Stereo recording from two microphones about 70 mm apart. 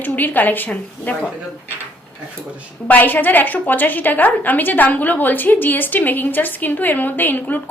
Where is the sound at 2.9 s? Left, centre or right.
Left.